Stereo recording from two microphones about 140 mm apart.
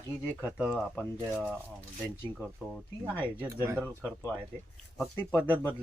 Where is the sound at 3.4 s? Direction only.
20° right (ahead or behind).